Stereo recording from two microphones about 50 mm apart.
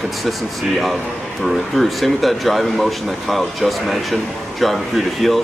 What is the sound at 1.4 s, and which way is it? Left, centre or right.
Speech, centre.